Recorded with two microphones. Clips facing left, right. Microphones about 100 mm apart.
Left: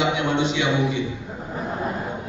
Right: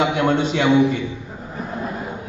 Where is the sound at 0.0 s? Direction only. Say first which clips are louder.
Right 3 dB; 45° right (ahead or behind).